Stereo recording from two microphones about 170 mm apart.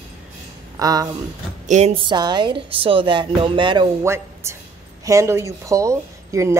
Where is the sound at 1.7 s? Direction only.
40° right (ahead or behind).